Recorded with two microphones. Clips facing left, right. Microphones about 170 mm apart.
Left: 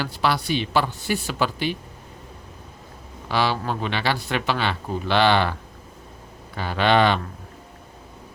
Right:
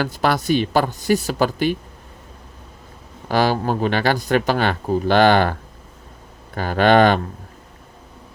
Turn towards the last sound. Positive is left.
turn(degrees=-45)  # may be behind; listen again after turning